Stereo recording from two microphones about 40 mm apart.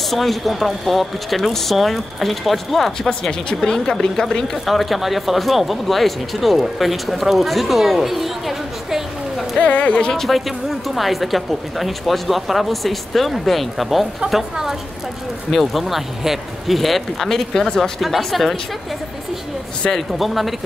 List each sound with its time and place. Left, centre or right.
0.1 s speech: centre
3.1 s a woman's voice: left
4.6 s speech: centre
9.6 s speech: left
10.1 s a woman's voice: centre
18.0 s speech: centre
19.9 s speech: centre